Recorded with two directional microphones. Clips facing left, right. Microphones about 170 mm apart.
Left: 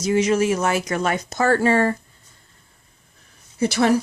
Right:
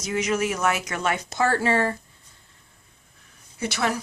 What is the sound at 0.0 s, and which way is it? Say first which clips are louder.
Speech: left 6 dB; 30° left (ahead or behind).